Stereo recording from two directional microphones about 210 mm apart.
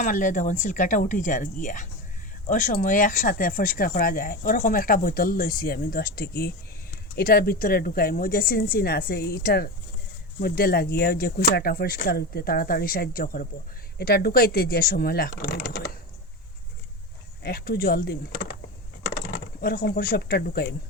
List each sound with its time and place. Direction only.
0.0 s speech: 40° left (ahead or behind)
17.4 s speech: 45° left (ahead or behind)